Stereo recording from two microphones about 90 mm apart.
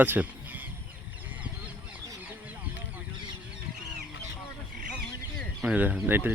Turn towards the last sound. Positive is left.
turn(degrees=-20)  # may be behind; listen again after turning